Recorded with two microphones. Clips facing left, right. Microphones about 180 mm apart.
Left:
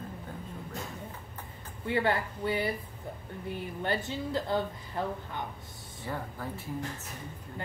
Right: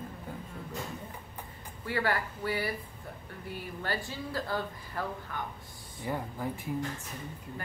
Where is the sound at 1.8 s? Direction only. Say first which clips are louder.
Left 3 dB; 20° left (ahead or behind).